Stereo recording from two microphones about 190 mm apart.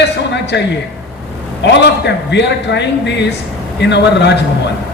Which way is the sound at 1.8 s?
65° left (ahead or behind).